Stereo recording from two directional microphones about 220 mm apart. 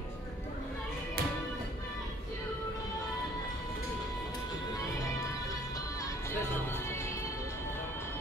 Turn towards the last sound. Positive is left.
turn(degrees=10)  # may be behind; listen again after turning